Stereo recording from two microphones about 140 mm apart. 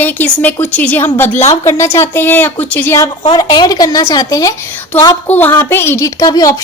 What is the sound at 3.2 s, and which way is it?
A woman's voice, 30° left (ahead or behind).